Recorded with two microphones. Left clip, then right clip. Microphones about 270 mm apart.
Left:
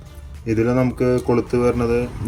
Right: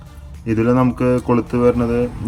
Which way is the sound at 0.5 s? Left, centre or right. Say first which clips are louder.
Right 3 dB; centre.